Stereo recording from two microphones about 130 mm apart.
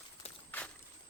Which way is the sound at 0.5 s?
15° left (ahead or behind).